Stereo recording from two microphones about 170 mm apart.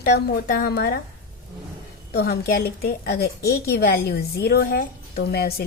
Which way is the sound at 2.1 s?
70° left (ahead or behind).